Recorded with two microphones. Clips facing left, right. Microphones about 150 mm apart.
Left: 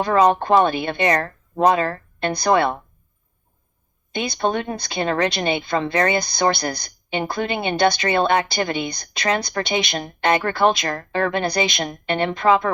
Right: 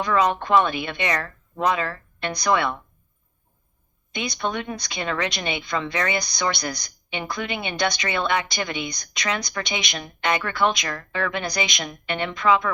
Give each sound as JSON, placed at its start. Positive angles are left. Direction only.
{"t": 0.0, "sound": "speech", "side_deg": 40}
{"t": 2.3, "sound": "speech", "side_deg": 30}
{"t": 4.1, "sound": "speech", "side_deg": 30}
{"t": 6.3, "sound": "speech", "side_deg": 55}
{"t": 7.1, "sound": "a woman's voice", "side_deg": 35}